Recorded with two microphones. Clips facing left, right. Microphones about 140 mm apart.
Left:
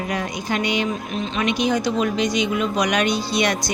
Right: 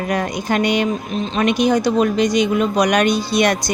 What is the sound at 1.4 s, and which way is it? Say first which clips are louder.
A woman's voice: right 5 dB; 50° right (ahead or behind).